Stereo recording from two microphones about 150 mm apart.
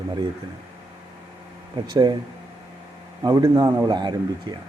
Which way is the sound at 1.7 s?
30° right (ahead or behind).